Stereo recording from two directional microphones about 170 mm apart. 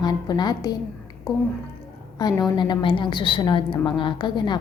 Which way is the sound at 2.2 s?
25° left (ahead or behind).